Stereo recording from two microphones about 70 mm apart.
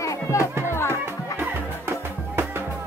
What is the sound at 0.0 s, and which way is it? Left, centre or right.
Music, left.